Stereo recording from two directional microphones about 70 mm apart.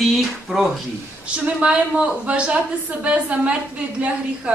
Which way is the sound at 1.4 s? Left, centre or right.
Centre.